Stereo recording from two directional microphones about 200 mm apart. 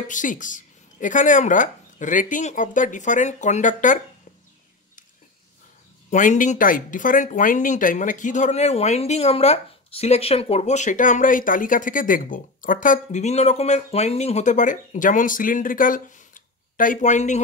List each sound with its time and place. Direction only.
0.1 s speech: 40° left (ahead or behind)
6.0 s speech: 40° left (ahead or behind)